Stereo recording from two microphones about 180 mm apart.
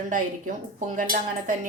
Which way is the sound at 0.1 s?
45° right (ahead or behind).